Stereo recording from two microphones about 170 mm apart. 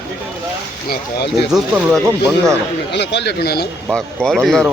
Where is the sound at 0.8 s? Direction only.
65° left (ahead or behind).